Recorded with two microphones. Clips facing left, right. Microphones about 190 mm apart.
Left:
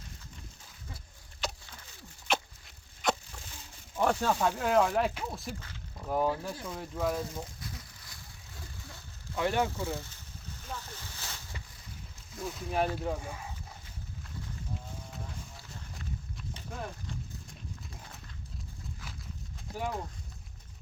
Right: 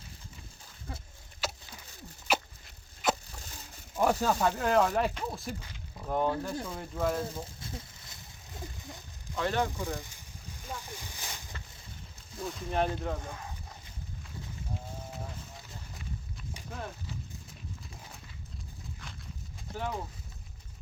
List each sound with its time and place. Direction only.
1.4 s a sound: 5° right (ahead or behind)
2.2 s dog: 5° right (ahead or behind)
3.9 s speech: 5° right (ahead or behind)
5.5 s speech: 15° right (ahead or behind)
6.0 s speech: 5° left (ahead or behind)
7.6 s a sound: 25° right (ahead or behind)
9.3 s speech: 15° left (ahead or behind)
9.6 s speech: 15° right (ahead or behind)
10.6 s boat: 10° right (ahead or behind)
12.4 s speech: centre (ahead or behind)
16.6 s horse: centre (ahead or behind)
19.7 s speech: 10° left (ahead or behind)